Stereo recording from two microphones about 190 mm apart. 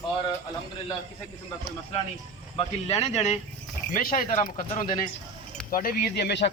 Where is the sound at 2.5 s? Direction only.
35° left (ahead or behind).